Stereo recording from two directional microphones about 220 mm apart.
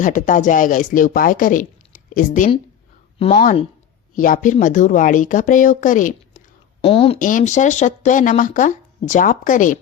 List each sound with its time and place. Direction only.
0.0 s speech: 35° left (ahead or behind)